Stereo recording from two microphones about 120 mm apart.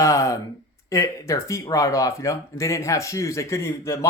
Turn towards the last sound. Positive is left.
turn(degrees=25)  # may be behind; listen again after turning